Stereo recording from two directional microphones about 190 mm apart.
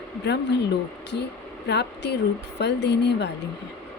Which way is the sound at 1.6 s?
60° left (ahead or behind).